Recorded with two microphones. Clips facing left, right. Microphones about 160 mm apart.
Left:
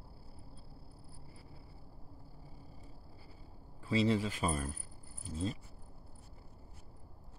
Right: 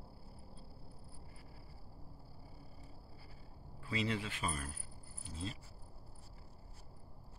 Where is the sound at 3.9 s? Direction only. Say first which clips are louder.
Left 7 dB; 35° left (ahead or behind).